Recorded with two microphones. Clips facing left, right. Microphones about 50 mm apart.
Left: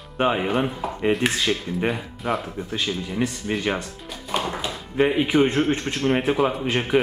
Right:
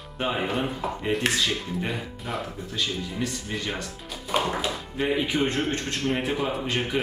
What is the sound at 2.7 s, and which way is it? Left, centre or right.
Speech, left.